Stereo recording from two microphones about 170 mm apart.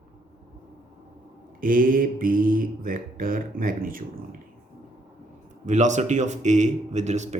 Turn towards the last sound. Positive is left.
turn(degrees=-40)  # may be behind; listen again after turning